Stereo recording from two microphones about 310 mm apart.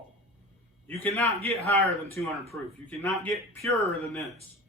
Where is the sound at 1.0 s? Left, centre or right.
Centre.